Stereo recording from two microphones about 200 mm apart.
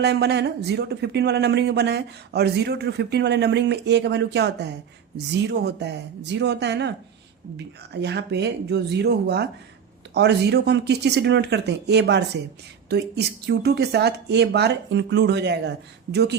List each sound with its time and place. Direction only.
0.0 s speech: 55° right (ahead or behind)
8.0 s speech: 60° right (ahead or behind)